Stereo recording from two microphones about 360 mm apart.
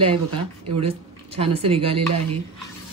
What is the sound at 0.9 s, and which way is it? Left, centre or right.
Speech, centre.